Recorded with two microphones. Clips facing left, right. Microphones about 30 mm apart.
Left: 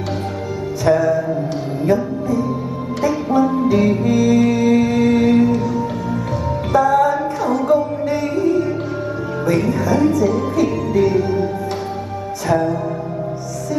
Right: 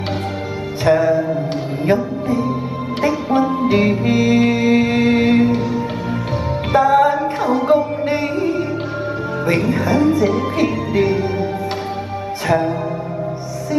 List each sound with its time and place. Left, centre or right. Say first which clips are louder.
0.8 s music: right 1 dB; right
2.2 s music: right 1 dB; right
9.7 s music: right 1 dB; right
12.4 s music: even; right